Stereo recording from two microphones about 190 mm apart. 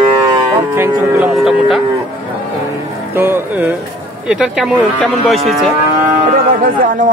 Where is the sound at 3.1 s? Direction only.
10° right (ahead or behind).